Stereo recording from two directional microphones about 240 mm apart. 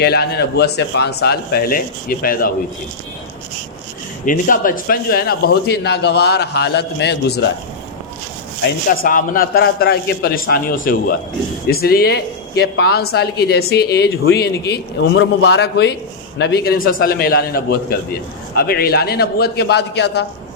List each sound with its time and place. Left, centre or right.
0.0 s speech: left
4.3 s a man's voice: left
8.9 s speech: left